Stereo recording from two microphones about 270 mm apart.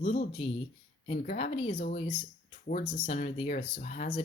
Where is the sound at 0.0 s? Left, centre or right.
Left.